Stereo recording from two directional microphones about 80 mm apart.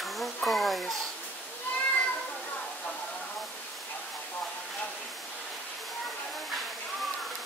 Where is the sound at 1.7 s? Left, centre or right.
Left.